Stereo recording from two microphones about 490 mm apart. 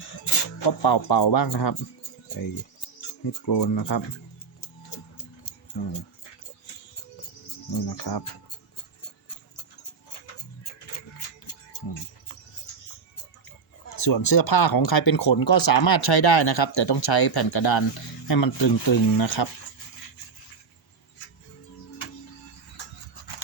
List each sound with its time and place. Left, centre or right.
0.3 s speech: left
3.4 s speech: left
7.9 s speech: left
13.9 s speech: left